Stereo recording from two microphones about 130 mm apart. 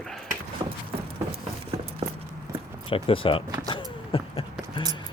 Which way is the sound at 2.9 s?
45° left (ahead or behind).